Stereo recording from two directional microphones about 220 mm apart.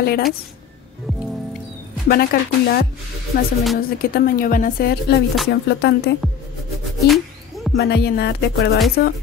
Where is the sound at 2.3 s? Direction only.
45° left (ahead or behind).